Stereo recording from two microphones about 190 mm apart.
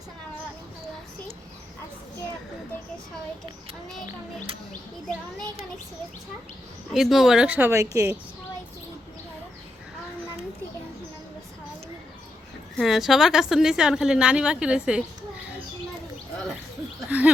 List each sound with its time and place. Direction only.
6.9 s a woman's voice: centre (ahead or behind)
12.7 s a woman's voice: centre (ahead or behind)
17.1 s speech: 5° right (ahead or behind)